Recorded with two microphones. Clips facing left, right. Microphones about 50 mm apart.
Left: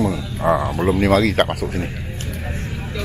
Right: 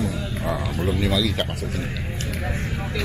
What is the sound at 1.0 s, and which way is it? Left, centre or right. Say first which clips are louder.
Speech: left 9 dB; left.